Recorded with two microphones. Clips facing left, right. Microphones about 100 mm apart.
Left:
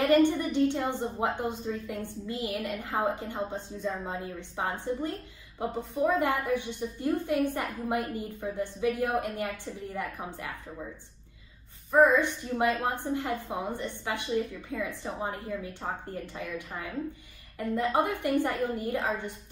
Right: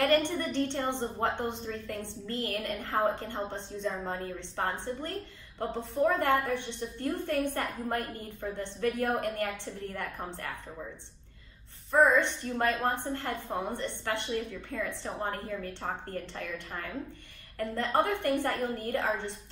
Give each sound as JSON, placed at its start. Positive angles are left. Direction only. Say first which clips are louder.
{"t": 0.0, "sound": "a woman's voice", "louder": "left 4 dB", "side_deg": 15}
{"t": 11.9, "sound": "a woman's voice", "louder": "left 2 dB", "side_deg": 10}